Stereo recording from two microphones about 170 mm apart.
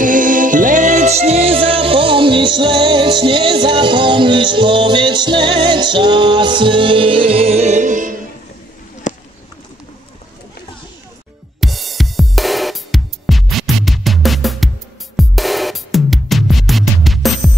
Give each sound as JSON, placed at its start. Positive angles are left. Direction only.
{"t": 0.0, "sound": "music", "side_deg": -50}
{"t": 9.1, "sound": "a sound", "side_deg": 45}
{"t": 11.6, "sound": "music", "side_deg": 0}